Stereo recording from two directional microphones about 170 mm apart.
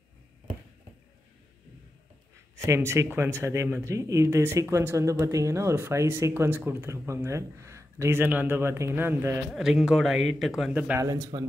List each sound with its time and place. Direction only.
2.5 s speech: 15° right (ahead or behind)
9.5 s a man's voice: 5° right (ahead or behind)
11.0 s speech: 20° right (ahead or behind)